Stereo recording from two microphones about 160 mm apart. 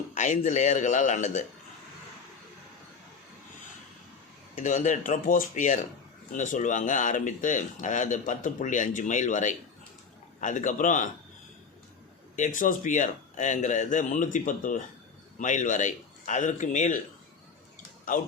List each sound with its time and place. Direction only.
0.1 s speech: 50° left (ahead or behind)
4.5 s speech: 50° left (ahead or behind)
12.4 s speech: 55° left (ahead or behind)